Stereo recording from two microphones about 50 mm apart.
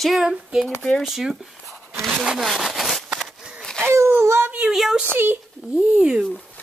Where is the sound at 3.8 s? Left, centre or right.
Right.